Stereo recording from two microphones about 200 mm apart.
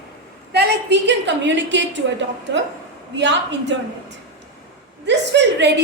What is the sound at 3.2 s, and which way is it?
Speech, 60° right (ahead or behind).